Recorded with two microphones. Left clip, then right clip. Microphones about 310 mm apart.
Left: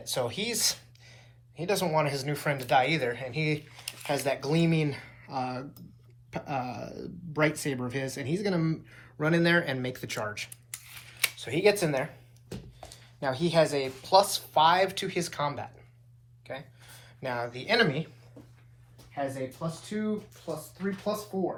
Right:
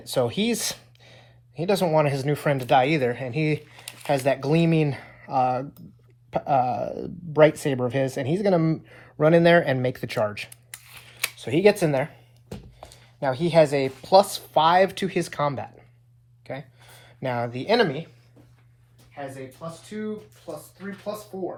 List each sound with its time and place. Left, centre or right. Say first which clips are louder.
0.1 s speech: right 7 dB; right
13.1 s speech: right 6 dB; right
16.4 s a sound: right 4 dB; right
17.2 s speech: right 6 dB; right
19.1 s speech: left 3 dB; left